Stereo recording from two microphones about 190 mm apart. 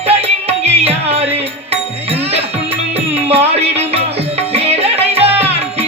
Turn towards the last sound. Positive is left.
turn(degrees=-30)  # may be behind; listen again after turning